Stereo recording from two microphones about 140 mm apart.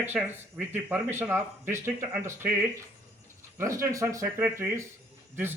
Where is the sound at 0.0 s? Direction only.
10° right (ahead or behind).